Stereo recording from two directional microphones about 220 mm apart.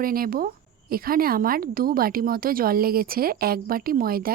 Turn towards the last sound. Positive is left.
turn(degrees=-40)  # may be behind; listen again after turning